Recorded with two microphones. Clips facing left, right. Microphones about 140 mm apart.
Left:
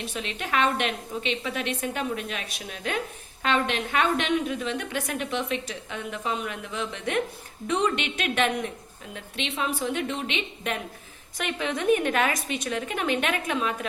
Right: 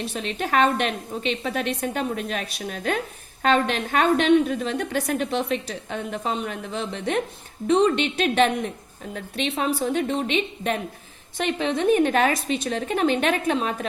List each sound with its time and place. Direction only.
0.1 s a woman's voice: 35° right (ahead or behind)